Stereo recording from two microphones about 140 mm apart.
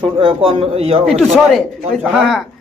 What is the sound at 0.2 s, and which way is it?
Speech, 40° right (ahead or behind).